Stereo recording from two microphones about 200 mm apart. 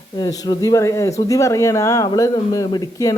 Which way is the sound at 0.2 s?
20° left (ahead or behind).